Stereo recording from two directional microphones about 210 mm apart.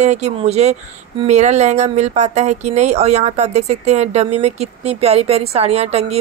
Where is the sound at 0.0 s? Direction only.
35° right (ahead or behind).